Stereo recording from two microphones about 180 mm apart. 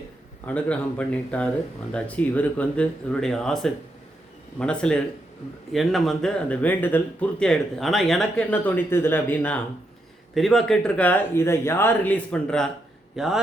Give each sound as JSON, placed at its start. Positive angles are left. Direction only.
{"t": 0.4, "sound": "speech", "side_deg": 5}